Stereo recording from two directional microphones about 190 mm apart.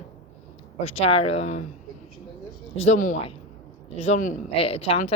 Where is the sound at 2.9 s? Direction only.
45° left (ahead or behind).